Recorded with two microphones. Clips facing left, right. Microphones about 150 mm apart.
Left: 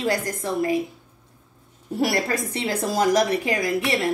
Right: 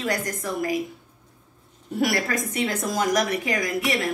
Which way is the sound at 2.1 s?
30° left (ahead or behind).